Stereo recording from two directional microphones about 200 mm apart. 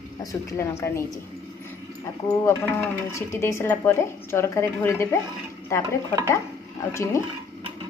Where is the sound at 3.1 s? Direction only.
15° left (ahead or behind).